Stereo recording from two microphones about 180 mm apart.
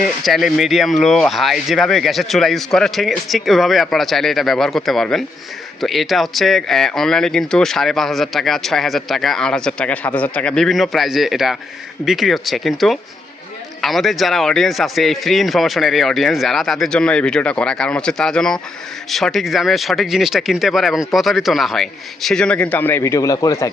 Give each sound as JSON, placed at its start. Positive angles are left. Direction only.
{"t": 0.3, "sound": "speech", "side_deg": 0}